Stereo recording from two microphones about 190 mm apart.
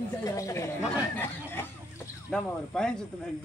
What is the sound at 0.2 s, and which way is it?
Speech, 15° left (ahead or behind).